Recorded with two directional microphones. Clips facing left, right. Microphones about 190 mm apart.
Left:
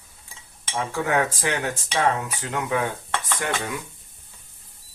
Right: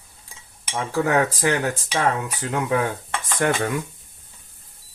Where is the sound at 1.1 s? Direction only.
35° right (ahead or behind).